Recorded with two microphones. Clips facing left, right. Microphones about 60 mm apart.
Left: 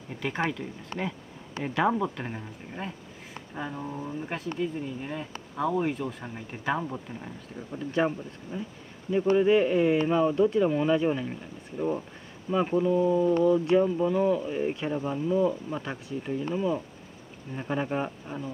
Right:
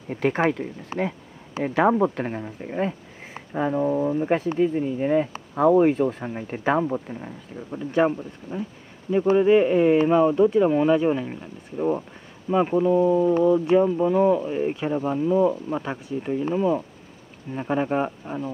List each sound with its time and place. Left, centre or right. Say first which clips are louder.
0.1 s speech: right 10 dB; right
0.4 s speech: right 7 dB; right
7.2 s speech: right 4 dB; centre
9.1 s speech: right 4 dB; centre
14.4 s speech: right 4 dB; centre